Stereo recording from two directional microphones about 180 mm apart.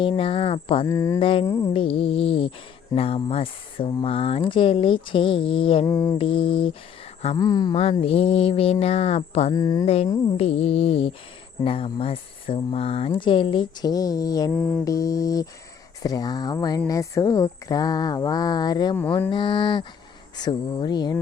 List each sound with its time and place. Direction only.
0.0 s speech: 30° left (ahead or behind)
0.9 s speech: 15° left (ahead or behind)
1.2 s speech: 30° left (ahead or behind)
1.7 s a sound: 30° left (ahead or behind)
2.9 s speech: 30° left (ahead or behind)
5.9 s speech: 15° left (ahead or behind)
6.1 s speech: 30° left (ahead or behind)
7.8 s a sound: 35° left (ahead or behind)
9.5 s speech: 20° left (ahead or behind)
9.8 s a sound: 35° left (ahead or behind)
11.6 s speech: 30° left (ahead or behind)
14.5 s mantra: 5° left (ahead or behind)
14.8 s speech: 20° left (ahead or behind)